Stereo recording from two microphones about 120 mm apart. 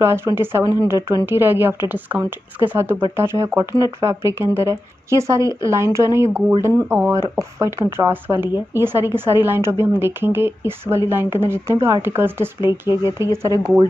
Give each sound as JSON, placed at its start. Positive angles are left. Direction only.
{"t": 0.0, "sound": "speech", "side_deg": -20}